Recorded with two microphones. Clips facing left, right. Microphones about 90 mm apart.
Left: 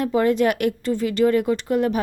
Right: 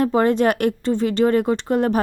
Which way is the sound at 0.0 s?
35° right (ahead or behind).